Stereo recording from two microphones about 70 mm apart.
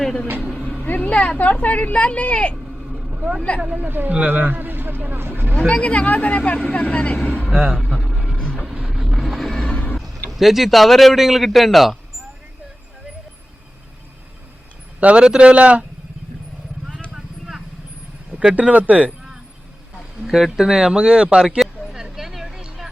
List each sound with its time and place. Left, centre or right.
0.8 s speech: left
3.6 s a man's voice: centre
3.8 s speech: right
5.5 s speech: centre
7.5 s speech: centre
8.4 s vehicle: centre
8.6 s vehicle: centre
10.0 s speech: centre
15.0 s a man's voice: centre
17.2 s vehicle: centre
18.3 s speech: centre
20.2 s a sound: centre